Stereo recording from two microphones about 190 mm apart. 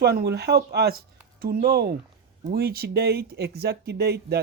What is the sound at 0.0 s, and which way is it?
Speech, 55° right (ahead or behind).